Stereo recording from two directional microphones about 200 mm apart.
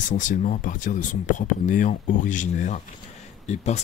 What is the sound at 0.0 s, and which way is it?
Speech, 40° left (ahead or behind).